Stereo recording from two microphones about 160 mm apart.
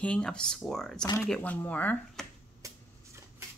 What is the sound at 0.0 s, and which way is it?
Speech, 5° left (ahead or behind).